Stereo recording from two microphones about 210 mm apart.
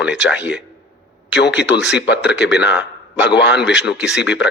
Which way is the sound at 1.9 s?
55° left (ahead or behind).